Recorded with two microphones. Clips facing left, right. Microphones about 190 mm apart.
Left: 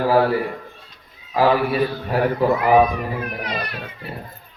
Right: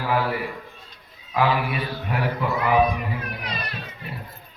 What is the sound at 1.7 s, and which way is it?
Mantra, 35° left (ahead or behind).